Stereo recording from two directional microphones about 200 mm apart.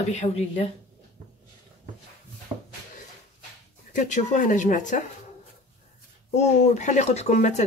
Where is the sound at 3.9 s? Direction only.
35° left (ahead or behind).